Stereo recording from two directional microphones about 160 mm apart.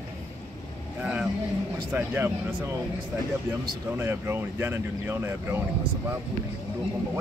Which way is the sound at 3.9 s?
15° right (ahead or behind).